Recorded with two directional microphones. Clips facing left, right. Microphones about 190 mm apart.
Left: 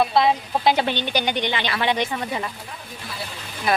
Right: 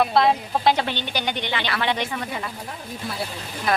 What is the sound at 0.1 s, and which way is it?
Speech, centre (ahead or behind).